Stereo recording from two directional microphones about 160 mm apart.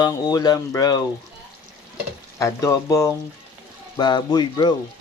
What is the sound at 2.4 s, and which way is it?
Speech, 20° left (ahead or behind).